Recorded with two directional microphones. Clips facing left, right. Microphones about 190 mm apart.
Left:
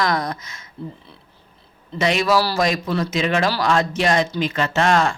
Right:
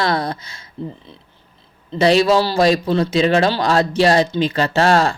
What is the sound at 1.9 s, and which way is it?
Speech, 30° right (ahead or behind).